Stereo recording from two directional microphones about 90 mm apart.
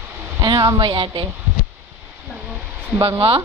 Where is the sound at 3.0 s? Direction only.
50° right (ahead or behind).